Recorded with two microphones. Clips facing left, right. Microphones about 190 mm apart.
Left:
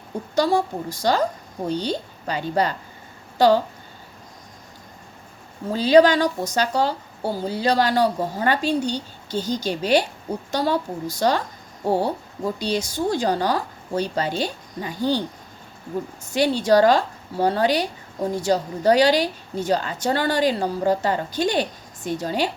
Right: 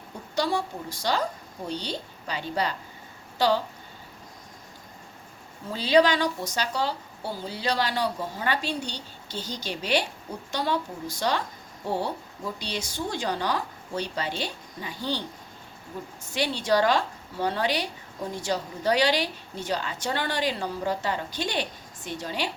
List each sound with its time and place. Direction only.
0.3 s a woman's voice: 45° left (ahead or behind)
5.6 s a woman's voice: 45° left (ahead or behind)
16.3 s a woman's voice: 45° left (ahead or behind)